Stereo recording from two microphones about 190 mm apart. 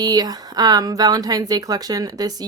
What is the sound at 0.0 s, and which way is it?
Speech, 20° right (ahead or behind).